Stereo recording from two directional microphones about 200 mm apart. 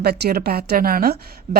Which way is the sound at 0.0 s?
50° right (ahead or behind).